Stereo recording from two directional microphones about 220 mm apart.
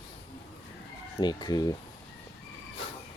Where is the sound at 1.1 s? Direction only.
20° left (ahead or behind).